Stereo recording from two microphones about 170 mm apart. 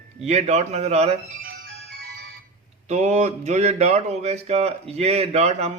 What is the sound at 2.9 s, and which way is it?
A man's voice, 45° right (ahead or behind).